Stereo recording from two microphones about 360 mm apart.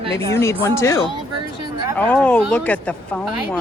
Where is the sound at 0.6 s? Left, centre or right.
Centre.